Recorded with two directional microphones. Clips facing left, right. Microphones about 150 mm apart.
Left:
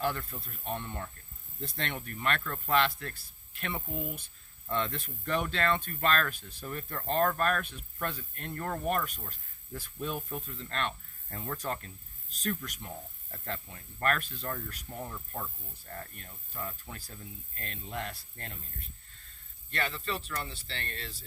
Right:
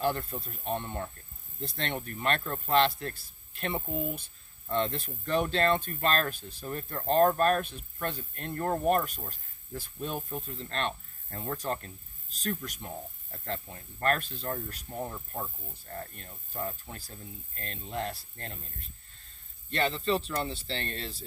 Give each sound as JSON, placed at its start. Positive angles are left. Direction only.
{"t": 0.0, "sound": "speech", "side_deg": -35}
{"t": 14.0, "sound": "speech", "side_deg": -30}
{"t": 19.7, "sound": "speech", "side_deg": -25}